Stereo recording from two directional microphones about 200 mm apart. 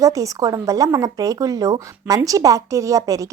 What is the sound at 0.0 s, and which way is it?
Speech, 15° right (ahead or behind).